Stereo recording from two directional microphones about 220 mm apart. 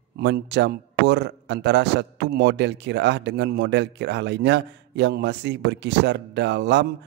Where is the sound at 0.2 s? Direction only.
50° right (ahead or behind).